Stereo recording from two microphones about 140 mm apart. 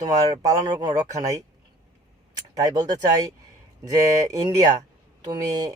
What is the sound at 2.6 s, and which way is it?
Speech, 30° right (ahead or behind).